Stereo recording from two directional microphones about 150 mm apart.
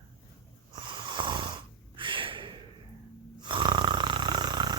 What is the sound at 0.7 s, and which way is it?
Snoring, 30° right (ahead or behind).